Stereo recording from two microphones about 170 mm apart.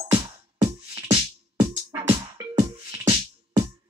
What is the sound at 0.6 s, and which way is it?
Music, 35° right (ahead or behind).